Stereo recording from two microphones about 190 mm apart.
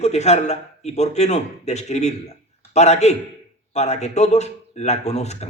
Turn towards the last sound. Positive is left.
turn(degrees=35)  # may be behind; listen again after turning